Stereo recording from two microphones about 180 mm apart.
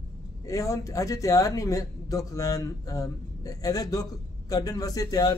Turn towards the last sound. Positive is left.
turn(degrees=20)  # may be behind; listen again after turning